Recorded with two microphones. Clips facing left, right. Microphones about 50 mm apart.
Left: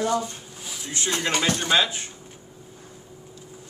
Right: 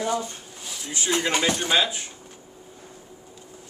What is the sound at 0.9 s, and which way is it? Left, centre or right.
Speech, centre.